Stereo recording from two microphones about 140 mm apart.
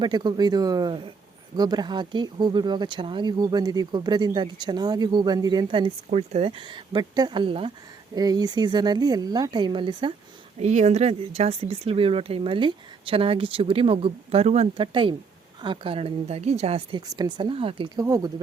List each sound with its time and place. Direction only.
0.0 s speech: 30° right (ahead or behind)
8.1 s speech: 25° right (ahead or behind)
10.6 s speech: 55° right (ahead or behind)
17.1 s speech: 30° right (ahead or behind)